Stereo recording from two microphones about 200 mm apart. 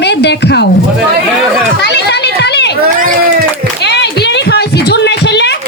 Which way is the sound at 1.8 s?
55° left (ahead or behind).